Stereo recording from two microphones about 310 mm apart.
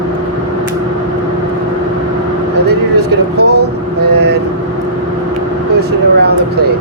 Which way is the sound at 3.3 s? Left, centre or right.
Right.